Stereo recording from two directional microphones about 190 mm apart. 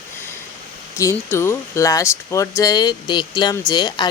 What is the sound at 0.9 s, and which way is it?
Speech, 15° left (ahead or behind).